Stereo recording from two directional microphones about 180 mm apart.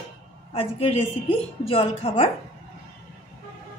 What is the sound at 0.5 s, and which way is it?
A woman's voice, 30° left (ahead or behind).